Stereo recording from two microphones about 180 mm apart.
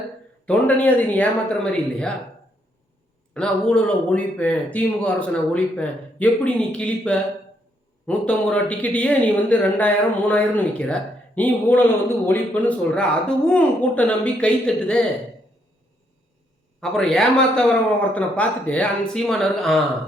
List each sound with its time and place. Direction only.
0.4 s speech: 10° left (ahead or behind)
3.3 s a man's voice: 5° left (ahead or behind)
16.8 s a man's voice: centre (ahead or behind)